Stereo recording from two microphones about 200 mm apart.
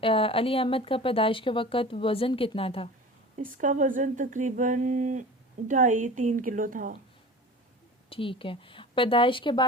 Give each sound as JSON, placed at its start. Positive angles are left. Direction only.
{"t": 0.0, "sound": "speech", "side_deg": 25}
{"t": 3.3, "sound": "speech", "side_deg": -40}
{"t": 8.1, "sound": "speech", "side_deg": 25}